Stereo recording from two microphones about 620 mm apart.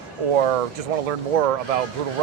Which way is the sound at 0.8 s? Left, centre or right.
Right.